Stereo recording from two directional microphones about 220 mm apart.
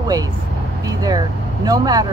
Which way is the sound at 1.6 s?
15° right (ahead or behind).